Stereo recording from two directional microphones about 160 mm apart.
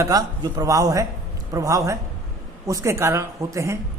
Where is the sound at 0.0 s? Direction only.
25° right (ahead or behind).